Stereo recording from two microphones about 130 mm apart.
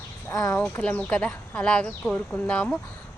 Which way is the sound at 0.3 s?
20° left (ahead or behind).